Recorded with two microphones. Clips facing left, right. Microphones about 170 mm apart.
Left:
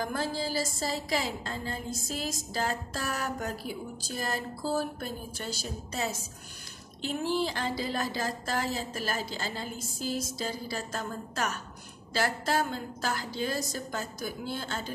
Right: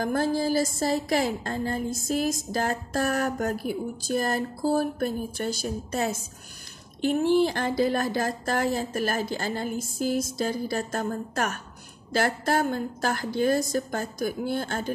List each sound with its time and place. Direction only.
0.0 s speech: 50° right (ahead or behind)